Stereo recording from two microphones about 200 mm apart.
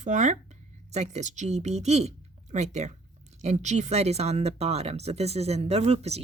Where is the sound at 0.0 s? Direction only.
35° right (ahead or behind).